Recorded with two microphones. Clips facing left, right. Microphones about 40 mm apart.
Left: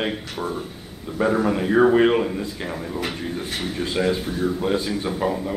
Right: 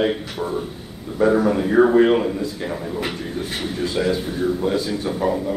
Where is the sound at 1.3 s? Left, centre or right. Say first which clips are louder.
Right 2 dB; centre.